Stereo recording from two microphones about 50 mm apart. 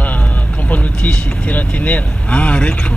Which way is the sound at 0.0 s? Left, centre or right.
Left.